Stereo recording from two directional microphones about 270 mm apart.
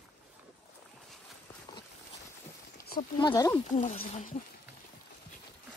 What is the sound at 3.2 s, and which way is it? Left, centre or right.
Speech, centre.